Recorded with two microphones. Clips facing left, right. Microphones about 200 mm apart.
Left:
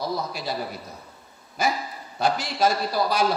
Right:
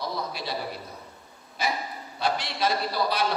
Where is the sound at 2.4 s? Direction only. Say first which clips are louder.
Left 4 dB; 45° left (ahead or behind).